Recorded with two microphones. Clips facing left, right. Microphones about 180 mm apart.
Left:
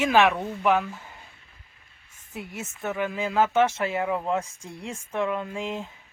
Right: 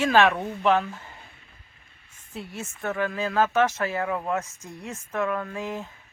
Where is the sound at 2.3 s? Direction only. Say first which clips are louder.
Even; 20° left (ahead or behind).